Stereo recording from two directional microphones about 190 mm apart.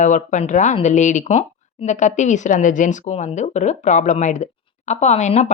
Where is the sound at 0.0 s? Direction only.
40° left (ahead or behind).